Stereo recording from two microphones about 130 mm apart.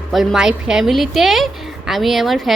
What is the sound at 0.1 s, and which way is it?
A woman's voice, centre (ahead or behind).